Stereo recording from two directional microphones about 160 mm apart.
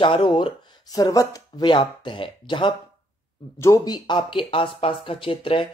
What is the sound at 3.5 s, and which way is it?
Speech, 20° left (ahead or behind).